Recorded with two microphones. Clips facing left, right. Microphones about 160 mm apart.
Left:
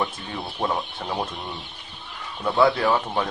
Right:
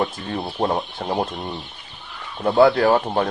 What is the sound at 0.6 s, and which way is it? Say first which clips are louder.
Speech: right 3 dB; 40° right (ahead or behind).